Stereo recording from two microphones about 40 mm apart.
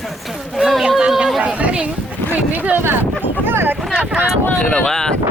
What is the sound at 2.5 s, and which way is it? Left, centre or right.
Speech, right.